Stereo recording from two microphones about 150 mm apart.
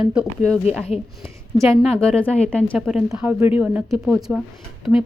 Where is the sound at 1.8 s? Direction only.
5° left (ahead or behind).